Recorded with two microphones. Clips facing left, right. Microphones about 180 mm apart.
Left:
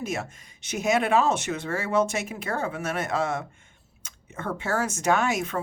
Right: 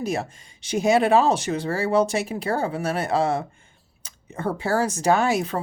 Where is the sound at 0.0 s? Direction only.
35° right (ahead or behind).